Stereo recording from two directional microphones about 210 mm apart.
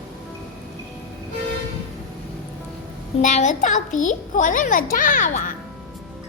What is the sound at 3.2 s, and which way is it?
A child's voice, 35° left (ahead or behind).